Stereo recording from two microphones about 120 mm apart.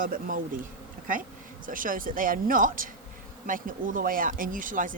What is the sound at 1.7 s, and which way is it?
Speech, 90° right.